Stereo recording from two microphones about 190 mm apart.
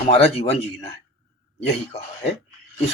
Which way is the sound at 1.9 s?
35° left (ahead or behind).